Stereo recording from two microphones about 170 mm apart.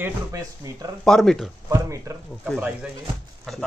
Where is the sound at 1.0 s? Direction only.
5° left (ahead or behind).